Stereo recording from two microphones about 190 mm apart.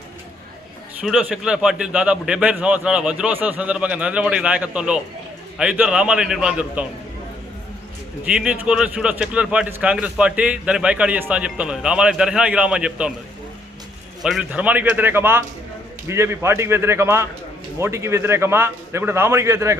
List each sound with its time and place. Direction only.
1.0 s speech: 5° right (ahead or behind)
8.2 s speech: 5° right (ahead or behind)
14.2 s a man's voice: centre (ahead or behind)